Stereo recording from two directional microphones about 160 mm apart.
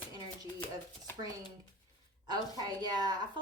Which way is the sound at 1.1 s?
15° left (ahead or behind).